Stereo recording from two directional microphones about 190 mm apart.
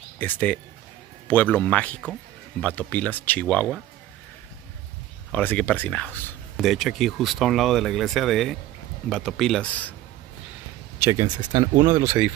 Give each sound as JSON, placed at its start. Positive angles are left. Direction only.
{"t": 0.2, "sound": "speech", "side_deg": 10}
{"t": 5.3, "sound": "speech", "side_deg": 10}
{"t": 11.0, "sound": "speech", "side_deg": -15}